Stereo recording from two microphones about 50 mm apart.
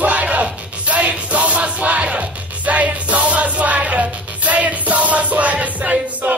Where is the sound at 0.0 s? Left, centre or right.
Right.